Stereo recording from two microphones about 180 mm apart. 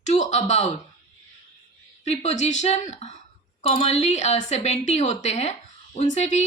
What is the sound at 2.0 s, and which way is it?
A woman's voice, 40° left (ahead or behind).